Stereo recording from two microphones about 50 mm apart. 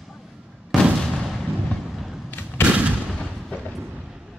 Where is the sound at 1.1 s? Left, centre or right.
Centre.